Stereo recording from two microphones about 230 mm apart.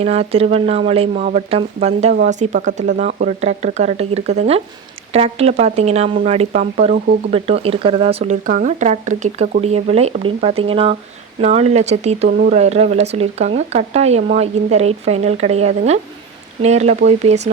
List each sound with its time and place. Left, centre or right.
0.0 s speech: right